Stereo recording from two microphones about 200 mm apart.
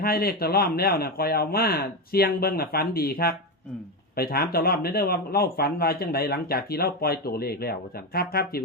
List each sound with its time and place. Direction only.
0.0 s speech: 50° left (ahead or behind)